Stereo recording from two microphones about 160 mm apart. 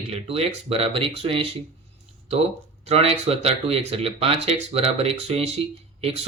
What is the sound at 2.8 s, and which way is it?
Speech, 40° right (ahead or behind).